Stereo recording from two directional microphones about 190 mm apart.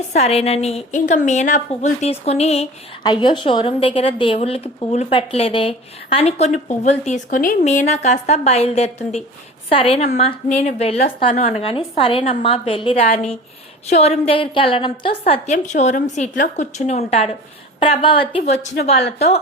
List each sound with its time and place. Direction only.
0.1 s speech: 35° left (ahead or behind)